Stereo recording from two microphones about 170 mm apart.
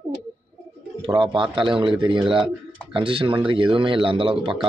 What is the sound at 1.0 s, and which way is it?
Speech, 30° right (ahead or behind).